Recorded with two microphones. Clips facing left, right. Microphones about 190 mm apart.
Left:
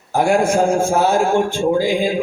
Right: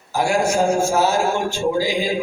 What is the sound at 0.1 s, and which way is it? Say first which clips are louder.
A man's voice: left 4 dB; 55° left (ahead or behind).